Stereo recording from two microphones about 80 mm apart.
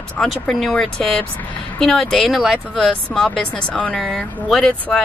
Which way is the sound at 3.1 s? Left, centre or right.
Centre.